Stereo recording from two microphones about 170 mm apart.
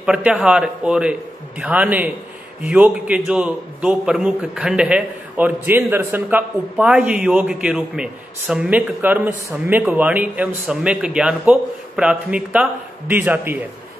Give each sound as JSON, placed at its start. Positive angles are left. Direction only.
{"t": 0.0, "sound": "a man's voice", "side_deg": -5}